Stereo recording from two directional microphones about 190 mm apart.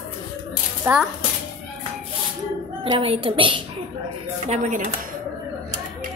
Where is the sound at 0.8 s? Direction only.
15° right (ahead or behind).